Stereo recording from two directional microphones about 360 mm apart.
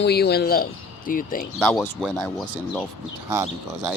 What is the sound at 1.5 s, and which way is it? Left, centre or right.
Speech, centre.